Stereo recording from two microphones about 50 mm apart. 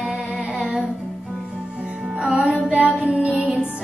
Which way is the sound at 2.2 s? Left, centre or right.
Right.